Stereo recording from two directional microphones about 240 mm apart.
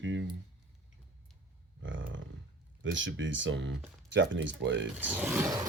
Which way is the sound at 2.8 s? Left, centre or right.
Right.